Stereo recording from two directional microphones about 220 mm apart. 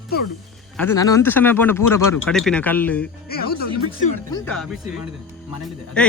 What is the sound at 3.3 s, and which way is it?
Speech, 45° left (ahead or behind).